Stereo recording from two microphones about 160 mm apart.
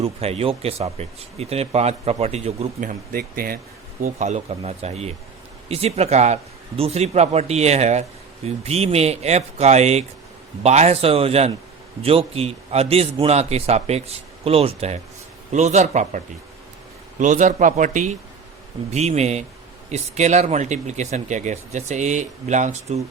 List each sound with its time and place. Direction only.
0.0 s a man's voice: 40° right (ahead or behind)
3.1 s speech: 65° right (ahead or behind)
4.0 s a man's voice: 45° right (ahead or behind)